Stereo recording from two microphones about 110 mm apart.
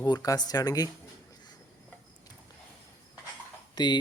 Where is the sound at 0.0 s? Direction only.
35° left (ahead or behind).